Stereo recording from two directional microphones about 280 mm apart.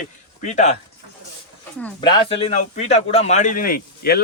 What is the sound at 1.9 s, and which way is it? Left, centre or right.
A man's voice, centre.